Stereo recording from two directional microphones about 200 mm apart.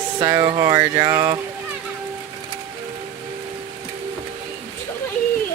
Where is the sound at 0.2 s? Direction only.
20° right (ahead or behind).